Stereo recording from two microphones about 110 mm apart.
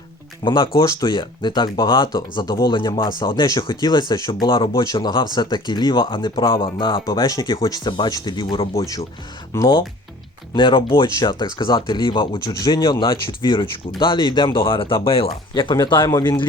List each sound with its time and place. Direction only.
0.4 s speech: 50° left (ahead or behind)
7.5 s speech: 30° left (ahead or behind)
8.7 s speech: 30° left (ahead or behind)
10.5 s speech: 50° left (ahead or behind)